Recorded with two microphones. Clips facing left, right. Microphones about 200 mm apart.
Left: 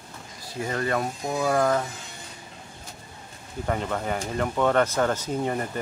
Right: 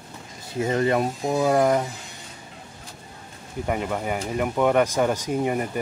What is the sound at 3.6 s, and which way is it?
Speech, 10° right (ahead or behind).